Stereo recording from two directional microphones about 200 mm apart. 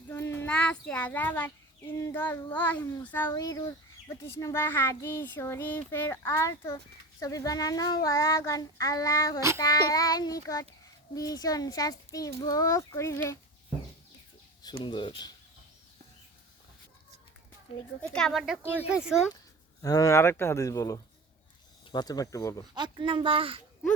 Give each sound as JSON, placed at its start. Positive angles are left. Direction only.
{"t": 0.1, "sound": "a child's voice", "side_deg": 10}
{"t": 14.8, "sound": "speech", "side_deg": 25}
{"t": 17.7, "sound": "speech", "side_deg": 30}
{"t": 18.1, "sound": "a woman's voice", "side_deg": 0}
{"t": 19.8, "sound": "a child's voice", "side_deg": 20}
{"t": 22.7, "sound": "speech", "side_deg": -20}